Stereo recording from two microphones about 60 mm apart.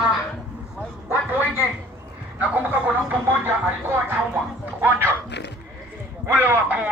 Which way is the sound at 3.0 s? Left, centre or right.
Right.